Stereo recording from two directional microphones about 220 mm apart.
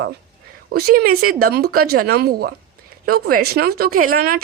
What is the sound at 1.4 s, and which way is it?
A woman's voice, 45° right (ahead or behind).